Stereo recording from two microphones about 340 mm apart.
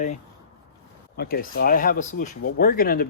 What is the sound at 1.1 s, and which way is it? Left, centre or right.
Speech, left.